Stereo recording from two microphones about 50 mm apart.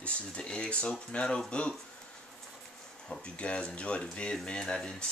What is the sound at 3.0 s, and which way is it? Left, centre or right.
Speech, centre.